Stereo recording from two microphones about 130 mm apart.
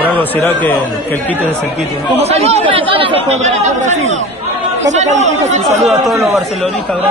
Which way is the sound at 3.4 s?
65° right (ahead or behind).